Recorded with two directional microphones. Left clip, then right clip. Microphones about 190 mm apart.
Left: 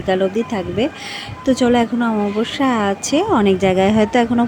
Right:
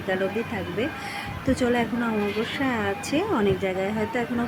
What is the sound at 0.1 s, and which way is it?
A woman's voice, 35° left (ahead or behind).